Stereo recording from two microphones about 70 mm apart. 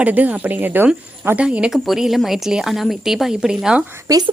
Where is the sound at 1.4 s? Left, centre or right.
Centre.